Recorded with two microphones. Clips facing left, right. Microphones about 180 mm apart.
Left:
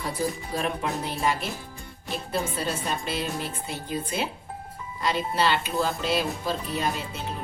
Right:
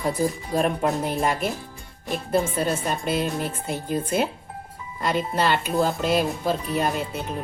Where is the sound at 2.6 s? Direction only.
50° right (ahead or behind).